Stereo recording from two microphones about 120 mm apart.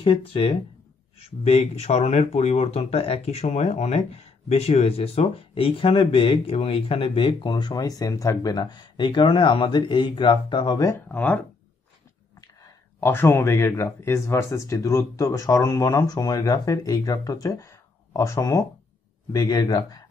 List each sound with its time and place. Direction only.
0.0 s speech: 50° left (ahead or behind)
11.1 s speech: 15° left (ahead or behind)
13.0 s speech: 20° left (ahead or behind); by 20.0 s 35° left (ahead or behind)